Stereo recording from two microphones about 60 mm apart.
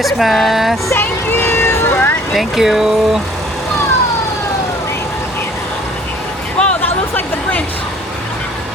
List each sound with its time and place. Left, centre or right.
0.0 s speech: centre
0.9 s vehicle: left
2.3 s speech: centre
6.6 s music: centre